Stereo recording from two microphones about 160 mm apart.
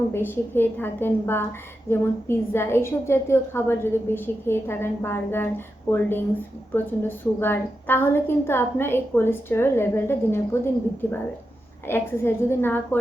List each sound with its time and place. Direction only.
0.1 s a woman's voice: 15° left (ahead or behind)
7.3 s a woman's voice: 15° left (ahead or behind)